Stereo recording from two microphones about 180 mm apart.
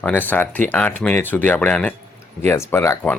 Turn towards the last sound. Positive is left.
turn(degrees=10)  # may be behind; listen again after turning